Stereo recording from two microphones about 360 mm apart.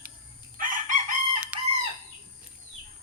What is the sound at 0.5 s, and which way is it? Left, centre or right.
Chicken, right.